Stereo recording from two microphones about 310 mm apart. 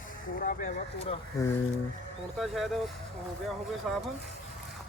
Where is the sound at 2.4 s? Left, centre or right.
Centre.